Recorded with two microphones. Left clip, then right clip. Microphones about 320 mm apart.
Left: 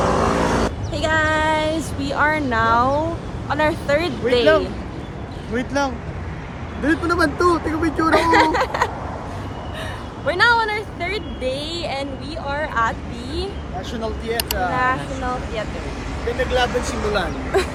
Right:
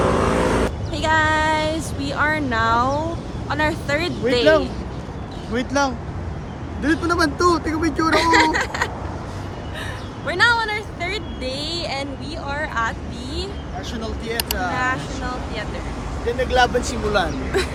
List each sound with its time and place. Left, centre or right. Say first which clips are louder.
0.0 s vehicle: even; left
0.9 s child singing: right 1 dB; centre
3.5 s speech: left 3 dB; centre
5.5 s speech: right 1 dB; centre
8.1 s speech: left 1 dB; centre
10.2 s speech: left 1 dB; centre
13.9 s speech: left 2 dB; centre
16.4 s speech: right 2 dB; centre
17.5 s speech: left 3 dB; centre